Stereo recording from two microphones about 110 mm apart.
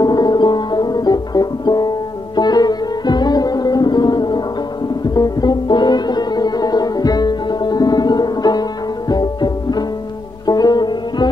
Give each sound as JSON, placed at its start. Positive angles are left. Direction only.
{"t": 0.0, "sound": "music", "side_deg": 40}